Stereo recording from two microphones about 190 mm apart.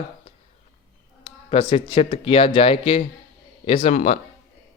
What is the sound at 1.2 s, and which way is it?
Speech, 25° left (ahead or behind).